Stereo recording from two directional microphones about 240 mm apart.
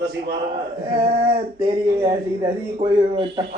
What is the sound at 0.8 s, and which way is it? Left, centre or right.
Speech, right.